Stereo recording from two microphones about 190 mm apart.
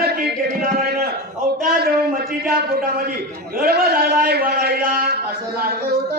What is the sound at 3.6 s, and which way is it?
A man's voice, 55° right (ahead or behind).